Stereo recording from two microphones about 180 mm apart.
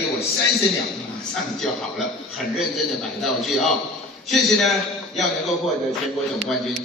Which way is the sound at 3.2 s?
Centre (ahead or behind).